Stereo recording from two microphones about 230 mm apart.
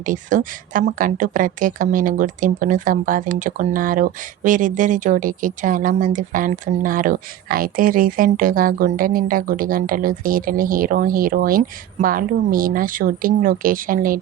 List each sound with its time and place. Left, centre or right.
0.0 s a woman's voice: right